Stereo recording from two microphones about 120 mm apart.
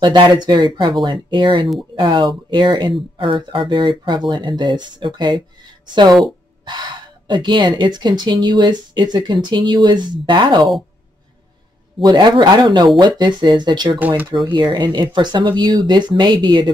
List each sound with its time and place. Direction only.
0.0 s speech: 40° right (ahead or behind)
12.1 s speech: 40° right (ahead or behind)
13.9 s speech: 15° right (ahead or behind)
14.3 s speech: 40° right (ahead or behind)